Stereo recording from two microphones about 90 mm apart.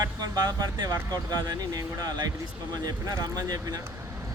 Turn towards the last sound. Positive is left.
turn(degrees=-45)  # may be behind; listen again after turning